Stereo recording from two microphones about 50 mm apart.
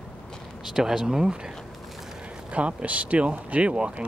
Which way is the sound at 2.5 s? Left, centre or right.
Right.